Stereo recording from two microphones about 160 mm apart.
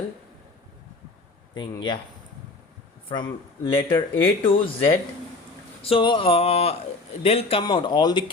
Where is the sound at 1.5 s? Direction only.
30° left (ahead or behind).